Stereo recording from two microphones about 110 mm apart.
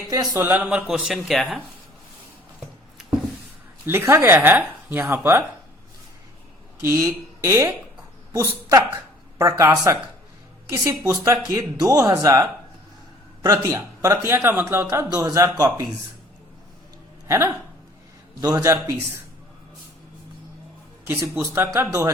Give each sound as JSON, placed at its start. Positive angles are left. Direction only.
{"t": 0.3, "sound": "speech", "side_deg": -15}
{"t": 3.8, "sound": "speech", "side_deg": -20}
{"t": 6.8, "sound": "a man's voice", "side_deg": -25}
{"t": 17.2, "sound": "speech", "side_deg": -25}
{"t": 18.3, "sound": "a man's voice", "side_deg": -35}
{"t": 21.1, "sound": "speech", "side_deg": -20}